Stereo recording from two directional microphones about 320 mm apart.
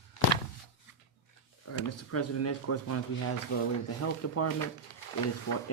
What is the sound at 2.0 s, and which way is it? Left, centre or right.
Speech, left.